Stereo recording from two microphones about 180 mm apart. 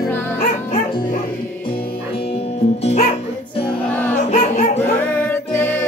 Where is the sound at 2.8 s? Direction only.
35° left (ahead or behind).